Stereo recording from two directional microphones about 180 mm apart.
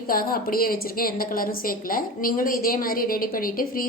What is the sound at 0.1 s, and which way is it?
A woman's voice, 55° left (ahead or behind).